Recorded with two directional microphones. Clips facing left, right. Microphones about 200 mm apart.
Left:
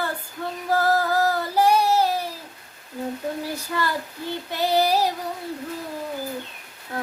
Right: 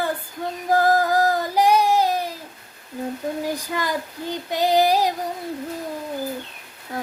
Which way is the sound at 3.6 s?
15° right (ahead or behind).